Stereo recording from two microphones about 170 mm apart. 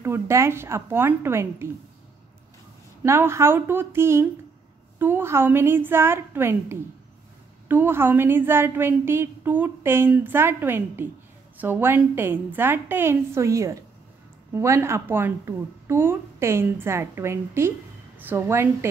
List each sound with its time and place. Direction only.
0.0 s a woman's voice: 15° right (ahead or behind)
3.0 s a woman's voice: 15° right (ahead or behind)